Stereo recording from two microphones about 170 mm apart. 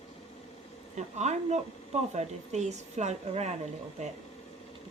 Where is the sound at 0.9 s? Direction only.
40° right (ahead or behind).